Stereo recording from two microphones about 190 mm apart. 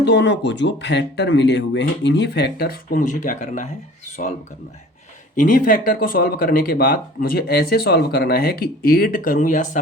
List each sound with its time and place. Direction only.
0.0 s speech: 65° left (ahead or behind); by 3.7 s 40° left (ahead or behind)
5.4 s speech: 45° left (ahead or behind)